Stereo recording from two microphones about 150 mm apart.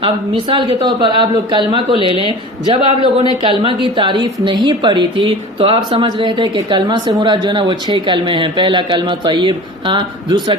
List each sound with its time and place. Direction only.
0.0 s speech: 35° right (ahead or behind)